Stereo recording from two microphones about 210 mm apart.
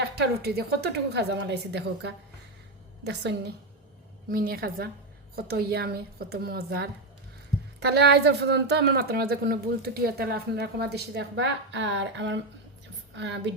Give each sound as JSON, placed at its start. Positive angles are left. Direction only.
{"t": 0.2, "sound": "a woman's voice", "side_deg": -50}